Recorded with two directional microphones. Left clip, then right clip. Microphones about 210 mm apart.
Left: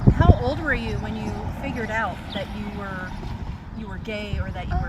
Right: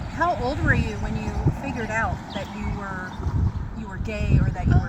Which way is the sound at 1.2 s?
5° left (ahead or behind).